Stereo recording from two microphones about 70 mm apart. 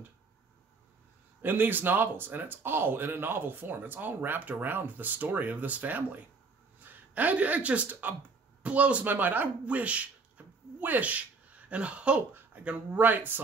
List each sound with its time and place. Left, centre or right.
1.4 s speech: right
12.4 s speech: right